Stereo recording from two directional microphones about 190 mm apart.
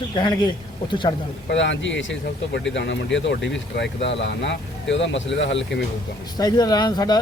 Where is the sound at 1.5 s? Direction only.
70° left (ahead or behind).